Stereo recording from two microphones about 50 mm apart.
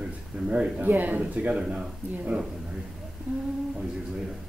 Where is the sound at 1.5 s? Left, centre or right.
Centre.